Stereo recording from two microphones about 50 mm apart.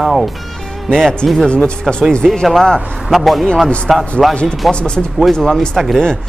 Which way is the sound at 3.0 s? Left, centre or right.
Centre.